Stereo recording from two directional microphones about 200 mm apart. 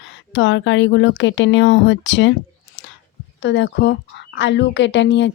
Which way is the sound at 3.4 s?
65° left (ahead or behind).